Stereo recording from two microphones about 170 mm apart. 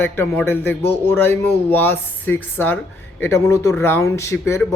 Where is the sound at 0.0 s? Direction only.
10° left (ahead or behind).